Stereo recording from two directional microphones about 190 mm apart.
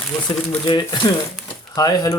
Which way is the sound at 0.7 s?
25° left (ahead or behind).